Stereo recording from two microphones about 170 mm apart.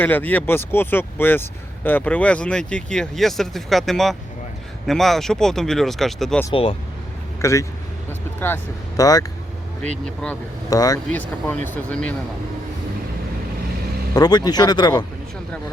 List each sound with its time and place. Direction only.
0.0 s speech: 10° left (ahead or behind)
6.5 s speech: 30° left (ahead or behind)
7.4 s speech: 15° left (ahead or behind)
10.7 s speech: 20° left (ahead or behind)
11.1 s speech: 10° left (ahead or behind)
14.2 s speech: 25° left (ahead or behind)